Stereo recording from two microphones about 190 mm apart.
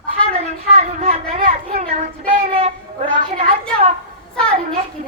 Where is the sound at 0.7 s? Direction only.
35° right (ahead or behind).